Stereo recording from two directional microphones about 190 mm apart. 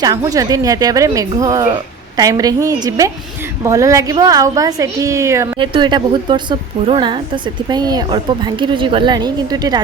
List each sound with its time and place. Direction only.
0.0 s a woman's voice: 20° right (ahead or behind)